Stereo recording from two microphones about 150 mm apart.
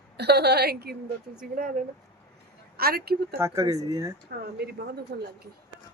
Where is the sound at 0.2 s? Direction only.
90° right.